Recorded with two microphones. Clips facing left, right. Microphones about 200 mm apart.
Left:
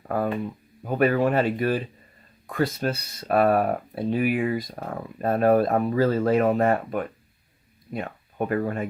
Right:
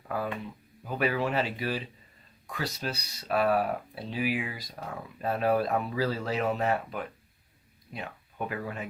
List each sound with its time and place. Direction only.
0.1 s speech: 50° left (ahead or behind)